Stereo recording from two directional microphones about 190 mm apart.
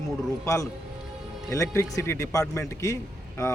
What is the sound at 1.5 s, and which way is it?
A man's voice, 15° left (ahead or behind).